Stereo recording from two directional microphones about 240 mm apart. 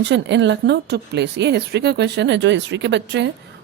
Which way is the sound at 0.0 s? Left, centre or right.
Right.